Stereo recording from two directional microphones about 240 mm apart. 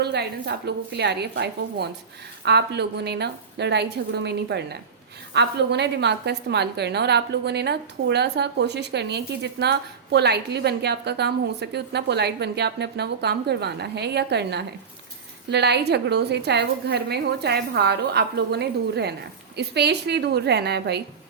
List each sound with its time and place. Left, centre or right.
0.0 s a woman's voice: right